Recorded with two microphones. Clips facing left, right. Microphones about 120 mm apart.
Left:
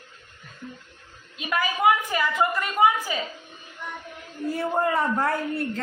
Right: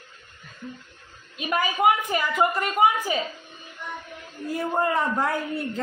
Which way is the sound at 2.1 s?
25° right (ahead or behind).